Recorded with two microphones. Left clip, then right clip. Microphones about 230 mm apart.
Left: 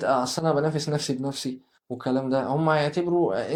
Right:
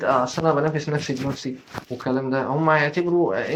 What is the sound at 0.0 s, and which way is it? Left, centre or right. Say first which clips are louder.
Speech: right 3 dB; left.